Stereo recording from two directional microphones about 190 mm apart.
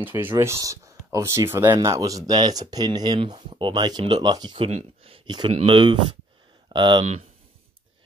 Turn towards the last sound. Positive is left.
turn(degrees=-25)  # may be behind; listen again after turning